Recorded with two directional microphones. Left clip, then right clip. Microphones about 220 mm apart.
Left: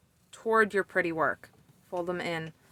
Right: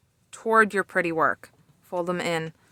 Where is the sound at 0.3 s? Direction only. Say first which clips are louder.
Right 5 dB; 30° right (ahead or behind).